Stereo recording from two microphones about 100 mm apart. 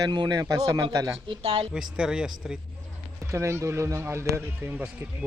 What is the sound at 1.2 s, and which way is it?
Speech, 65° right (ahead or behind).